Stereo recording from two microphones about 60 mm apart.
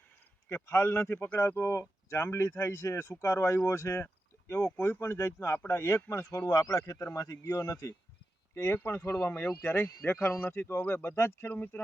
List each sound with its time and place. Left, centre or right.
0.4 s a man's voice: left
1.6 s a man's voice: left
2.5 s speech: left
4.8 s a man's voice: left
6.1 s speech: left
6.5 s speech: left
7.3 s speech: left
8.5 s speech: left
11.5 s speech: left